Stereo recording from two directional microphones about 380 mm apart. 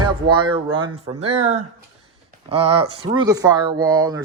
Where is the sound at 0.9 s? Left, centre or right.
Centre.